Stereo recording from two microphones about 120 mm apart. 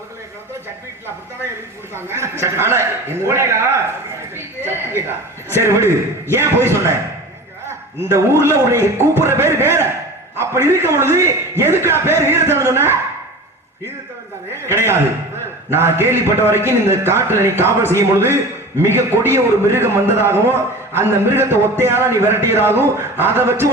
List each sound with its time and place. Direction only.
2.0 s a man's voice: 20° right (ahead or behind)
8.0 s a man's voice: 20° right (ahead or behind)
14.7 s a man's voice: 20° right (ahead or behind)